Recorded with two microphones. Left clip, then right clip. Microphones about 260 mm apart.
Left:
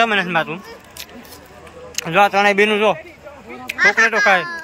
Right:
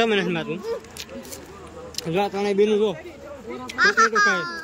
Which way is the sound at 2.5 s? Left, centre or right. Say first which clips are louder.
Left 5 dB; left.